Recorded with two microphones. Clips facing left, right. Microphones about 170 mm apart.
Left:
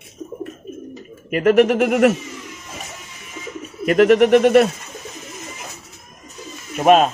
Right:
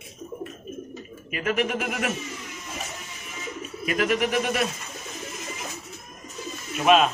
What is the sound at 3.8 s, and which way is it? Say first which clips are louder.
Speech: left 12 dB; 60° left (ahead or behind).